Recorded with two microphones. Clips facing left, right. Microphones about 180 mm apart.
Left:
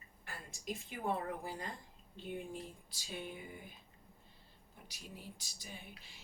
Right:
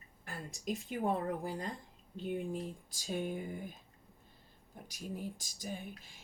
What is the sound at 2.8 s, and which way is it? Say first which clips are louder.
Speech: right 8 dB; 45° right (ahead or behind).